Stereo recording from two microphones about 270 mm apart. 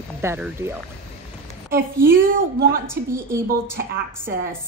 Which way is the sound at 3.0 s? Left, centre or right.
Right.